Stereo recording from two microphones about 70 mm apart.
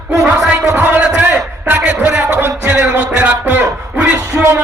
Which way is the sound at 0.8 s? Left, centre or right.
Right.